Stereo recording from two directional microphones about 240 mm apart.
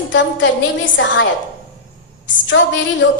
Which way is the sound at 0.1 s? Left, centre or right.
Left.